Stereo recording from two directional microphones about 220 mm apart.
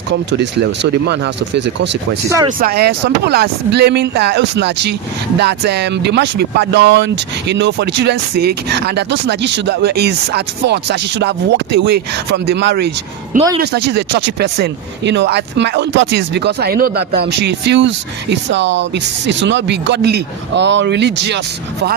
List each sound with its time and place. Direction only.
0.1 s speech: 50° right (ahead or behind)